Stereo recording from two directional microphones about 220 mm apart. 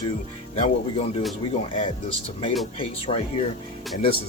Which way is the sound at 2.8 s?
25° left (ahead or behind).